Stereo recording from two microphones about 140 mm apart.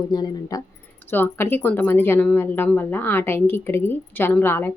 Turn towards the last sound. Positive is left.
turn(degrees=15)  # may be behind; listen again after turning